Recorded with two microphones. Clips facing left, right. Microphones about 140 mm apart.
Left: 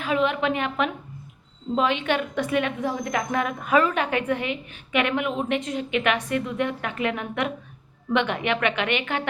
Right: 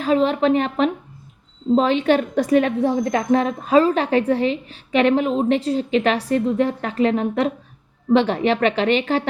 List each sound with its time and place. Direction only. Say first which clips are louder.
0.0 s a woman's voice: right 6 dB; 35° right (ahead or behind)